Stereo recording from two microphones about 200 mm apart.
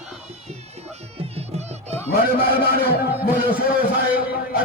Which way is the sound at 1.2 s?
30° right (ahead or behind).